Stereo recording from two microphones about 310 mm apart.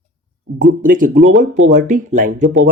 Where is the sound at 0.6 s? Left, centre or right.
Right.